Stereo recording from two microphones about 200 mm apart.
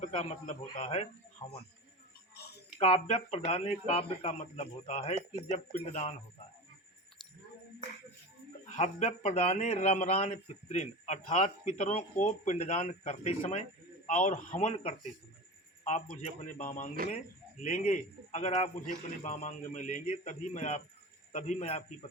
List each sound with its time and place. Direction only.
0.0 s a man's voice: 35° left (ahead or behind)
2.3 s a sound: 55° left (ahead or behind)
2.7 s speech: 30° left (ahead or behind)
8.7 s speech: 35° left (ahead or behind)